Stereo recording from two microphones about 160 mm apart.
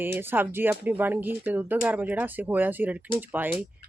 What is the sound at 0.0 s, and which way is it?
Speech, 15° right (ahead or behind).